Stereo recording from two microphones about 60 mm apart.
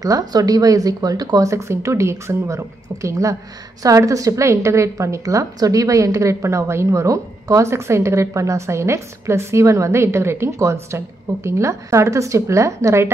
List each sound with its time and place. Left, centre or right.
0.0 s a woman's voice: right